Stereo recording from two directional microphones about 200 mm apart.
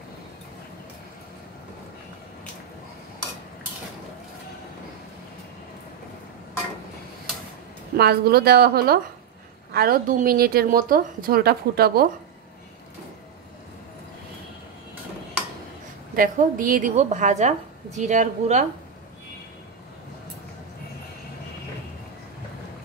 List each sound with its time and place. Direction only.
8.0 s a woman's voice: 55° right (ahead or behind)
16.2 s a woman's voice: 45° right (ahead or behind)